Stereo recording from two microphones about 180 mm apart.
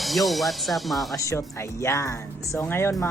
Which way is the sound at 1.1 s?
15° left (ahead or behind).